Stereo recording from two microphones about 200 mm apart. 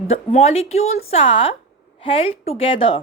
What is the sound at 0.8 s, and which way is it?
Speech, 90° left.